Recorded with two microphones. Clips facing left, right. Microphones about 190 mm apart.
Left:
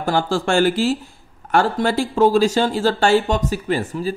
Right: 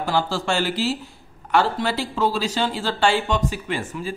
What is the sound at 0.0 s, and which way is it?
Speech, 50° left (ahead or behind).